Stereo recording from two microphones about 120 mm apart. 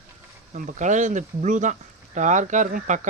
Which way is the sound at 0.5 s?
90° right.